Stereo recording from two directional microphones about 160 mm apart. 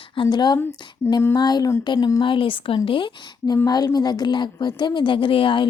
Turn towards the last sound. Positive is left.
turn(degrees=30)  # may be behind; listen again after turning